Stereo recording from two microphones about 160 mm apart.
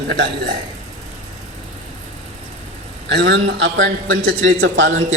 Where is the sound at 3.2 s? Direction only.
90° right.